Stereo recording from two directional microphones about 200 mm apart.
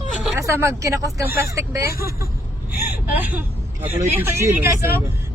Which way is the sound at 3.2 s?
10° right (ahead or behind).